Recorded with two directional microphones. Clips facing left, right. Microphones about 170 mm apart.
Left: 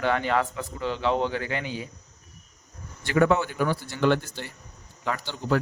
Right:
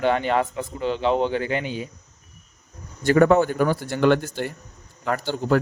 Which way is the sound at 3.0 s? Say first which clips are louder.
Right 6 dB; 45° right (ahead or behind).